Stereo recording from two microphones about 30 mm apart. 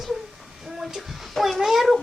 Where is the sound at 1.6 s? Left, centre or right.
Centre.